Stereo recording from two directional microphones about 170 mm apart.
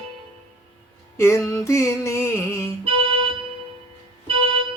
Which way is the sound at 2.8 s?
35° right (ahead or behind).